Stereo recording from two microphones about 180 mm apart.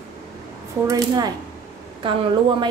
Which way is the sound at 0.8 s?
20° right (ahead or behind).